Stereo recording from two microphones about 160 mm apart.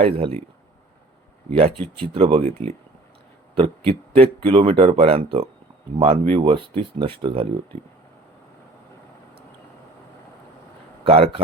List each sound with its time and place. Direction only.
0.0 s speech: 40° right (ahead or behind)
1.5 s speech: 35° right (ahead or behind)
3.5 s speech: 35° right (ahead or behind)
11.0 s speech: 35° right (ahead or behind)